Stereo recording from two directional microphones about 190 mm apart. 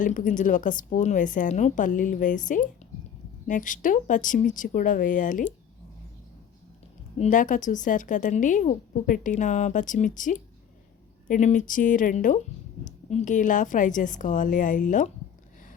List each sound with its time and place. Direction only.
0.0 s a woman's voice: 40° left (ahead or behind)
7.2 s a woman's voice: 40° left (ahead or behind)